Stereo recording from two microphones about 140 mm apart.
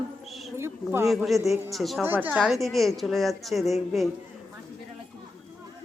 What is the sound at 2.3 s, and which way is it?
Speech, centre (ahead or behind).